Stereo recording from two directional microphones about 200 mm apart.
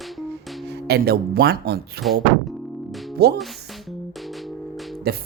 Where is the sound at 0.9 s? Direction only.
50° right (ahead or behind).